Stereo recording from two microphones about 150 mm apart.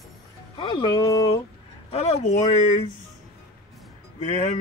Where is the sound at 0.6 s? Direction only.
35° left (ahead or behind).